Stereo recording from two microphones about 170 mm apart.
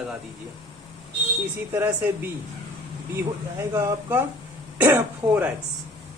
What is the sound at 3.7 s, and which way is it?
A man's voice, 15° right (ahead or behind).